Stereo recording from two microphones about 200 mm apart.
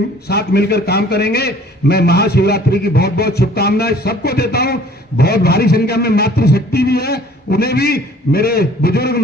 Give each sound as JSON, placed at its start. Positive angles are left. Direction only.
{"t": 0.3, "sound": "a man's voice", "side_deg": 55}